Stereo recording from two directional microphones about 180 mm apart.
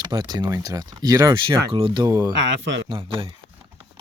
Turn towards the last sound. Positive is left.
turn(degrees=-30)  # may be behind; listen again after turning